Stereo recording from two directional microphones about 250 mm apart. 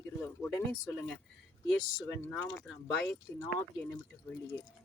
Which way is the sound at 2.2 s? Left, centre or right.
Centre.